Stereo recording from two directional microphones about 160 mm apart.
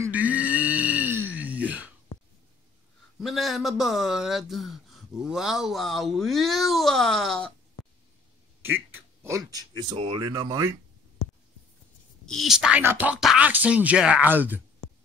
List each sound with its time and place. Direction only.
0.0 s a sound: 10° right (ahead or behind)
3.2 s speech: centre (ahead or behind)
8.6 s speech: 15° right (ahead or behind)
12.3 s speech: centre (ahead or behind)